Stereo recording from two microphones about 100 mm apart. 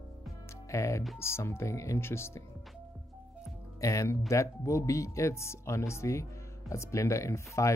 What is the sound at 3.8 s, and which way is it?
Speech, 30° left (ahead or behind).